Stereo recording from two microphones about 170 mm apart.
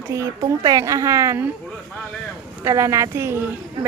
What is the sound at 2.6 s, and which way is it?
Speech, 15° right (ahead or behind).